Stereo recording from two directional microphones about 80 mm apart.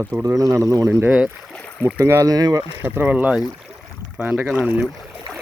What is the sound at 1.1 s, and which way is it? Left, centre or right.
Speech, centre.